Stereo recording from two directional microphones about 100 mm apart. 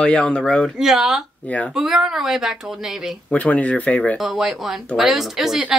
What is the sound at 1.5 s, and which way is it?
Speech, 15° left (ahead or behind).